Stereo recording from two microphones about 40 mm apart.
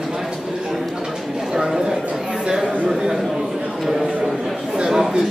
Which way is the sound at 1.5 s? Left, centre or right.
Centre.